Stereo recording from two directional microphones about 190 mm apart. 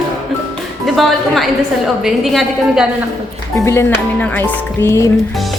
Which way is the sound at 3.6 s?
15° left (ahead or behind).